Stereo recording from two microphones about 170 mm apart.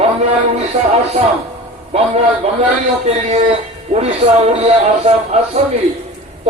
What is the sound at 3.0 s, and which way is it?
Speech, 40° right (ahead or behind).